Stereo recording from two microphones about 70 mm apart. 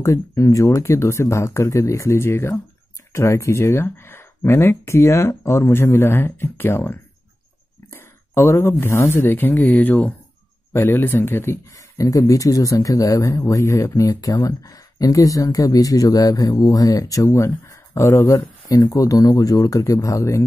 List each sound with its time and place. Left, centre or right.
0.0 s speech: left
10.7 s speech: left
11.7 s speech: left
17.3 s speech: left
18.9 s speech: left